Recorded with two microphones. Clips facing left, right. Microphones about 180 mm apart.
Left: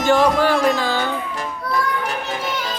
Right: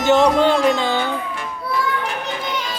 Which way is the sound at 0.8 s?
20° right (ahead or behind).